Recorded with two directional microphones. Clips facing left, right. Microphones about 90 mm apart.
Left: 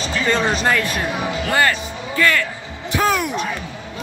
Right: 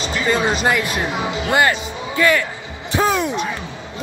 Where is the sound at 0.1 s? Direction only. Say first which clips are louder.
Even; 15° right (ahead or behind).